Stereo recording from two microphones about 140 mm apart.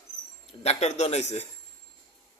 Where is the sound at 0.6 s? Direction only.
50° left (ahead or behind).